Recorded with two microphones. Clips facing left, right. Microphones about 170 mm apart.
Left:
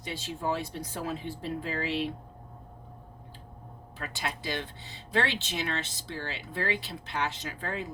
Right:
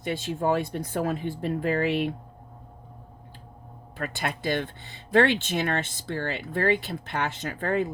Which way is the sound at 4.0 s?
55° right (ahead or behind).